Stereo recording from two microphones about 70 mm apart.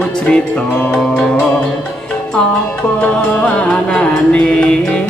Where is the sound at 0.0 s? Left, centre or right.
Centre.